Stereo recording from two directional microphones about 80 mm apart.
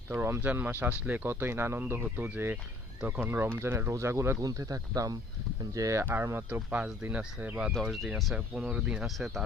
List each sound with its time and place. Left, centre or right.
0.1 s speech: right
4.4 s speech: right
6.0 s speech: right
7.7 s speech: centre
8.4 s speech: centre
9.0 s speech: centre